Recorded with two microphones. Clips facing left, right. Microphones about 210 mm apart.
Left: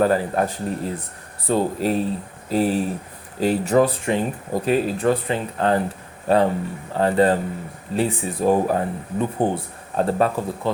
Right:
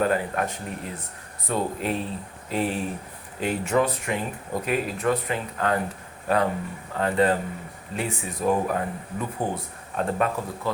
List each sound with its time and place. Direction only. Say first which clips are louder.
0.0 s speech: left 5 dB; 35° left (ahead or behind)